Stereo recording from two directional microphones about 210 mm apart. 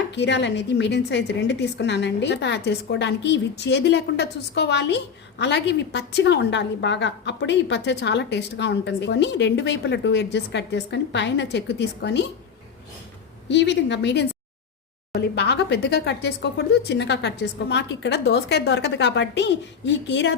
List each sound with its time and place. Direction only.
0.1 s a woman's voice: 55° left (ahead or behind)
13.5 s a woman's voice: 55° left (ahead or behind)